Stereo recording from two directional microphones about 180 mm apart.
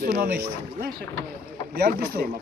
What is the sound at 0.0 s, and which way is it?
Speech, 55° right (ahead or behind).